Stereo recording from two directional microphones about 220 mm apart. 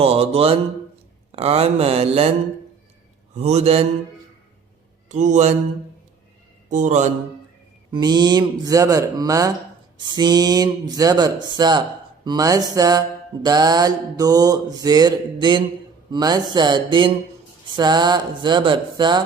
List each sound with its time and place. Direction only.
0.0 s speech: 25° right (ahead or behind)
3.3 s speech: 30° right (ahead or behind)
5.0 s a man's voice: 35° right (ahead or behind)
6.7 s a man's voice: 35° right (ahead or behind)
7.9 s mantra: 20° right (ahead or behind)
10.0 s speech: 20° right (ahead or behind)
12.2 s mantra: 15° right (ahead or behind)
16.1 s speech: 20° right (ahead or behind)